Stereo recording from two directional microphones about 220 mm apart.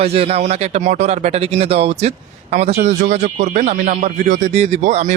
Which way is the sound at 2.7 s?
40° right (ahead or behind).